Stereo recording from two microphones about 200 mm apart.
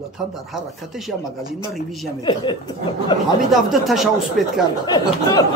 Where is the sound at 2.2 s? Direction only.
25° left (ahead or behind).